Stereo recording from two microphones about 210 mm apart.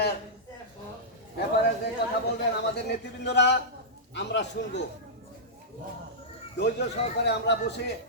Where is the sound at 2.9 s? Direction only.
55° left (ahead or behind).